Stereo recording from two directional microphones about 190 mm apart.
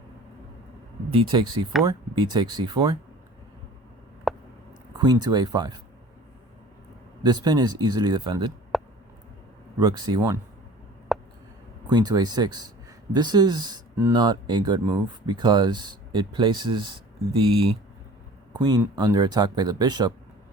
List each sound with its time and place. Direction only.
1.1 s speech: 25° right (ahead or behind)
4.3 s a sound: centre (ahead or behind)
4.9 s speech: 20° right (ahead or behind)
7.2 s speech: 20° right (ahead or behind)
8.7 s a sound: centre (ahead or behind)
9.8 s speech: 20° right (ahead or behind)
11.1 s a sound: centre (ahead or behind)
11.9 s speech: 20° right (ahead or behind)
18.5 s speech: 20° right (ahead or behind)